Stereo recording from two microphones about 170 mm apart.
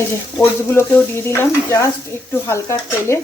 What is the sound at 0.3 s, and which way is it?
Speech, 15° left (ahead or behind).